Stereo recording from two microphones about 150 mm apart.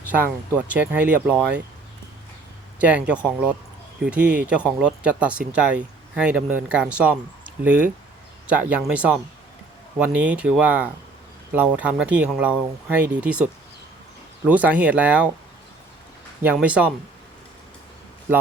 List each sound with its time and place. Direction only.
0.7 s speech: 10° right (ahead or behind)
2.8 s speech: 10° right (ahead or behind)
16.4 s speech: 10° right (ahead or behind)